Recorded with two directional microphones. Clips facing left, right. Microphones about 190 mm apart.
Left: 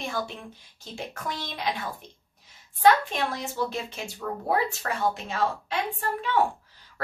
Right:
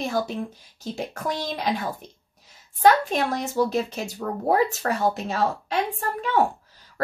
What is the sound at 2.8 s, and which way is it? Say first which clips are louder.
Speech: right 2 dB; 40° right (ahead or behind).